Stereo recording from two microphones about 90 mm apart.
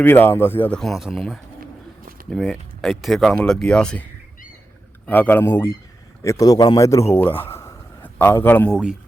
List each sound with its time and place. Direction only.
0.0 s speech: 25° left (ahead or behind)
0.7 s speech: 5° left (ahead or behind)
5.0 s speech: 20° left (ahead or behind)
6.2 s a man's voice: 40° left (ahead or behind); by 8.7 s 20° left (ahead or behind)